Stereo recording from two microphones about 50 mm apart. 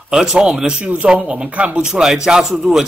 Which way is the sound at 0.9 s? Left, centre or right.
Right.